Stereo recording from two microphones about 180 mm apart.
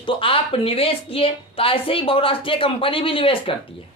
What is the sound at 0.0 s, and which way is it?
Speech, 30° left (ahead or behind).